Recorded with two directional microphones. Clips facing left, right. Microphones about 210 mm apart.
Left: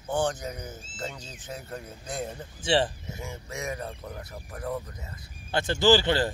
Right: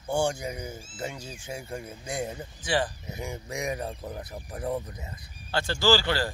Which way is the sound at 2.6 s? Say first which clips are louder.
Left 3 dB; 25° left (ahead or behind).